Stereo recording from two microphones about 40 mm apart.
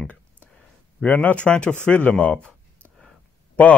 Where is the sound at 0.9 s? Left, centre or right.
Left.